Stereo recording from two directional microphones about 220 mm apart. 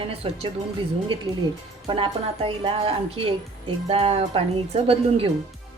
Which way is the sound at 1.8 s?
25° right (ahead or behind).